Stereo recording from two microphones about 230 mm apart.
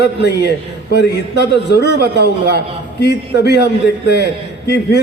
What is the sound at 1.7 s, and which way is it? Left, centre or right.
Speech, left.